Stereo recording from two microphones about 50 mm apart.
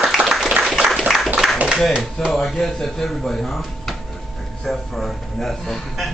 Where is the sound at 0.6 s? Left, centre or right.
Centre.